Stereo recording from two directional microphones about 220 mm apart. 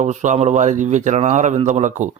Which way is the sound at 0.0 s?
35° right (ahead or behind).